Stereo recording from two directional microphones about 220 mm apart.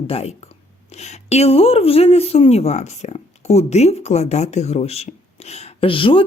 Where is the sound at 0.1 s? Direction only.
30° left (ahead or behind).